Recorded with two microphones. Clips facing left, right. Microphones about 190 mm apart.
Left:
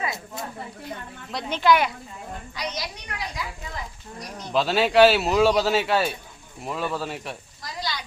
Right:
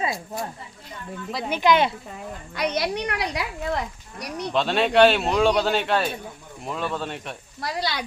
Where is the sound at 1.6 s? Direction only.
20° right (ahead or behind).